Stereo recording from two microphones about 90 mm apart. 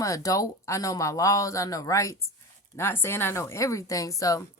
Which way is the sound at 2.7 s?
25° left (ahead or behind).